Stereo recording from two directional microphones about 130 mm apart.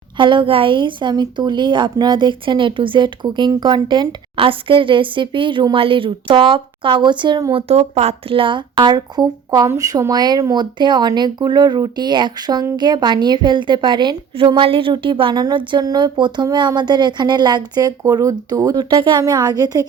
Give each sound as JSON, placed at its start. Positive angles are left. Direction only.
{"t": 0.2, "sound": "a woman's voice", "side_deg": -40}
{"t": 7.7, "sound": "a woman's voice", "side_deg": -55}